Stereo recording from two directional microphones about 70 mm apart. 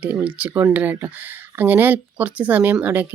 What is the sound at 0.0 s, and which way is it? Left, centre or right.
Speech, right.